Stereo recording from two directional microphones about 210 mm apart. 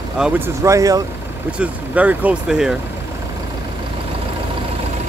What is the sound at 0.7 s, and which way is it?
Speech, 15° right (ahead or behind).